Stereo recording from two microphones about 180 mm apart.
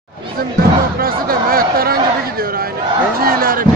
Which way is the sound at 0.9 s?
55° right (ahead or behind).